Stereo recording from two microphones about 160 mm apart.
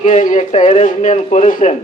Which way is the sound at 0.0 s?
50° left (ahead or behind).